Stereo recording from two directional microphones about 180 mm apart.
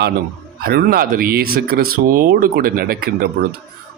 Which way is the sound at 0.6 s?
55° right (ahead or behind).